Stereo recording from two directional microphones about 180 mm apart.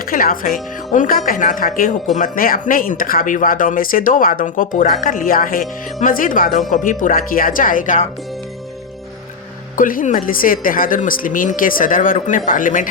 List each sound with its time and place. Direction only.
0.0 s speech: 50° left (ahead or behind)
9.7 s speech: 50° left (ahead or behind)